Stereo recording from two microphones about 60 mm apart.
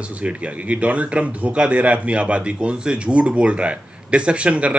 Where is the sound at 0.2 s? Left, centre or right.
Centre.